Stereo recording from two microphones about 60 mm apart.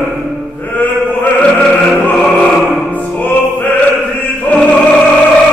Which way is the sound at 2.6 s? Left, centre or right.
Centre.